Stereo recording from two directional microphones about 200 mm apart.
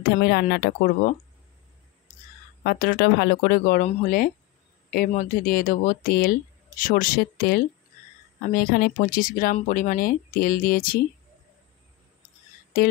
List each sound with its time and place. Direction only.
0.2 s speech: 55° left (ahead or behind)
2.6 s speech: 50° left (ahead or behind)
12.7 s speech: 50° left (ahead or behind)